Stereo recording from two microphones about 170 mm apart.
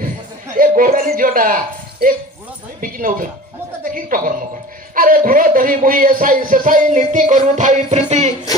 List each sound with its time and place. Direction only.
0.6 s a woman's voice: 55° right (ahead or behind)